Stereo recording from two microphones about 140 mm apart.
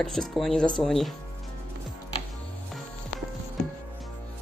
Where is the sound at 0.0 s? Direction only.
5° left (ahead or behind).